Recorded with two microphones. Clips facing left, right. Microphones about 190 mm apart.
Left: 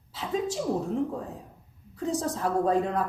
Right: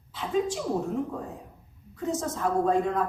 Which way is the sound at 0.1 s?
40° left (ahead or behind).